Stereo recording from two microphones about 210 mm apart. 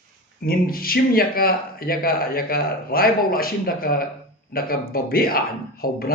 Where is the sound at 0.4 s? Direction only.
45° left (ahead or behind).